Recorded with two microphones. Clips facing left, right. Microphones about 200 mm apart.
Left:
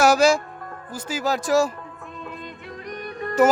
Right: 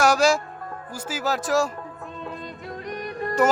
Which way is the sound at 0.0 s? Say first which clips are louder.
Left 2 dB; 5° left (ahead or behind).